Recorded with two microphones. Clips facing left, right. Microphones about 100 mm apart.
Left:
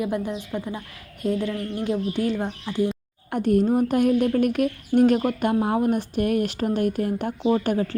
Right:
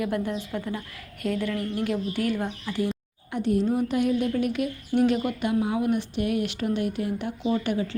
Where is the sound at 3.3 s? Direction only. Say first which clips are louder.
Left 4 dB; 50° left (ahead or behind).